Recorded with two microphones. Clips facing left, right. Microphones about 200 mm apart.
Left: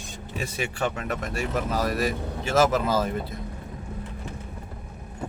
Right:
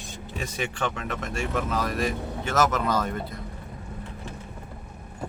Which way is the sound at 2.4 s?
30° left (ahead or behind).